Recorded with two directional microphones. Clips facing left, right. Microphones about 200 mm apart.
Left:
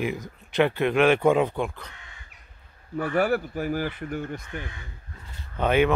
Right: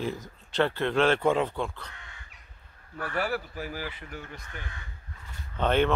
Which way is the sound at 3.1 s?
50° left (ahead or behind).